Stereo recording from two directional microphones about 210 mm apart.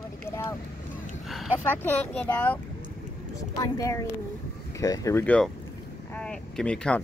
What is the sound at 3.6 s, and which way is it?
Speech, 15° left (ahead or behind).